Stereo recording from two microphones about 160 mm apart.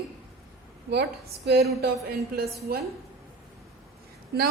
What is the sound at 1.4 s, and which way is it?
A woman's voice, 80° right.